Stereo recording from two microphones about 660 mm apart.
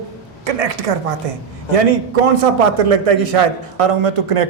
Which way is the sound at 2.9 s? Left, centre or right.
Right.